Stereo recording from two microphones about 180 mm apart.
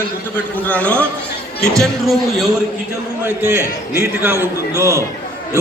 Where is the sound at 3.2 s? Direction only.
15° right (ahead or behind).